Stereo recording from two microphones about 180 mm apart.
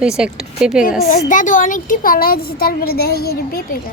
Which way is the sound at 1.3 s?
45° left (ahead or behind).